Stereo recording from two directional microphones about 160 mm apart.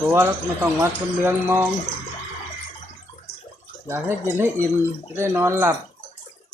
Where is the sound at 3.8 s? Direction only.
15° right (ahead or behind).